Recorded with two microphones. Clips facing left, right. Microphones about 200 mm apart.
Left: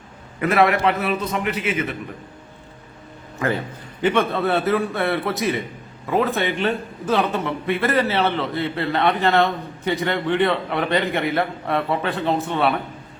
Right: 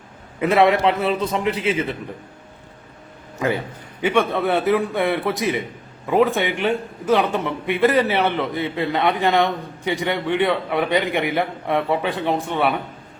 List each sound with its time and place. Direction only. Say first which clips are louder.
0.3 s a man's voice: right 2 dB; 25° right (ahead or behind)
4.0 s a man's voice: even; 15° right (ahead or behind)